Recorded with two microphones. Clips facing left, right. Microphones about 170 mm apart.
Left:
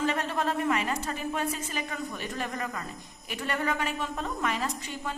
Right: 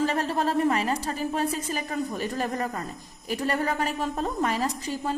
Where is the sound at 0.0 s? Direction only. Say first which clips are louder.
Right 3 dB; 35° right (ahead or behind).